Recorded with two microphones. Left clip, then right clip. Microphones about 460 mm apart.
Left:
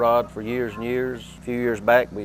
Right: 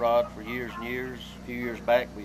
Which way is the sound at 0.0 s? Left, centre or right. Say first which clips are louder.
Left 4 dB; left.